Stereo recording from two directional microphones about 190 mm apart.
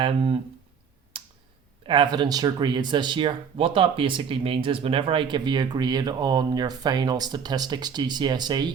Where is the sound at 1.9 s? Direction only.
25° right (ahead or behind).